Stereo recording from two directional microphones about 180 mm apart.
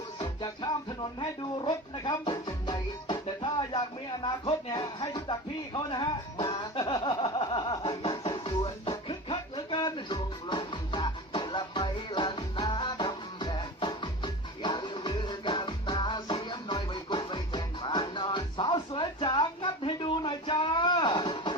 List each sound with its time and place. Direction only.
0.2 s speech: 25° left (ahead or behind)
4.2 s music: 25° left (ahead or behind)